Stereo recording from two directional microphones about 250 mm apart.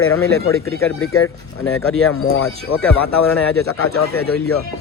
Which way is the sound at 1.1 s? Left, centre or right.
Left.